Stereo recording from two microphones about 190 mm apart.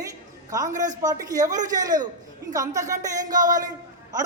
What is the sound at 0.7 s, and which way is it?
Speech, 40° right (ahead or behind).